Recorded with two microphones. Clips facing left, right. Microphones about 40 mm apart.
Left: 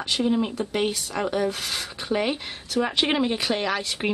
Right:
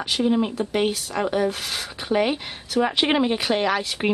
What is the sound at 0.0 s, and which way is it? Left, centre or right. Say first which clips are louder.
Speech: right 2 dB; centre.